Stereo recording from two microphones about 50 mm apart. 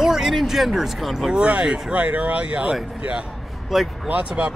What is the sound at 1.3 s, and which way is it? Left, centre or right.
Speech, centre.